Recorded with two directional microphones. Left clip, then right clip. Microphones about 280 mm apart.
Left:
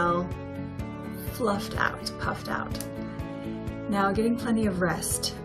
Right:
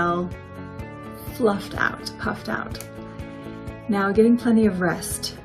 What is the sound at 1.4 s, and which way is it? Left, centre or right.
Speech, centre.